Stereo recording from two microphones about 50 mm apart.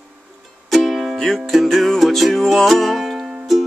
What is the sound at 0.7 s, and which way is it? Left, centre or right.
Music, centre.